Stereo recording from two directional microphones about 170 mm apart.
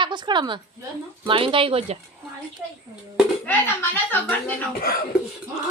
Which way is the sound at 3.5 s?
10° left (ahead or behind).